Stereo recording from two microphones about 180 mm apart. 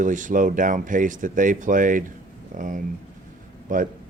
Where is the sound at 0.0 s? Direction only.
45° right (ahead or behind).